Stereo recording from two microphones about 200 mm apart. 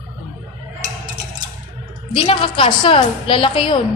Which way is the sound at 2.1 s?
25° left (ahead or behind).